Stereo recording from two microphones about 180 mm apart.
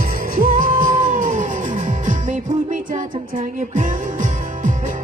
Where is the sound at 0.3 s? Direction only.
50° right (ahead or behind).